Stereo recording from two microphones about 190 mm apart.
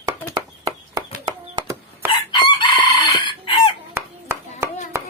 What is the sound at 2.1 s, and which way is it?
Chicken, 25° left (ahead or behind).